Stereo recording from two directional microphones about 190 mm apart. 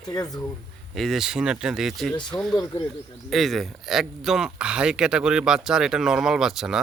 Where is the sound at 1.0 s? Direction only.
Centre (ahead or behind).